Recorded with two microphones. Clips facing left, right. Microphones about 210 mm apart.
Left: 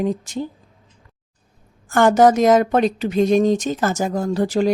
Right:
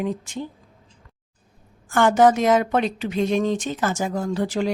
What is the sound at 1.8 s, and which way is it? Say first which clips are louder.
A woman's voice: left 3 dB; 40° left (ahead or behind).